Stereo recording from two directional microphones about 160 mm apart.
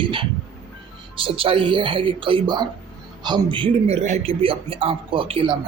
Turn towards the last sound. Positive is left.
turn(degrees=-35)  # may be behind; listen again after turning